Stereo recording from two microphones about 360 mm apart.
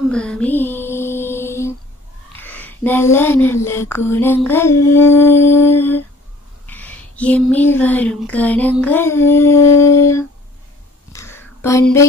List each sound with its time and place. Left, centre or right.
0.1 s mantra: centre
2.3 s speech: centre
6.6 s a sound: centre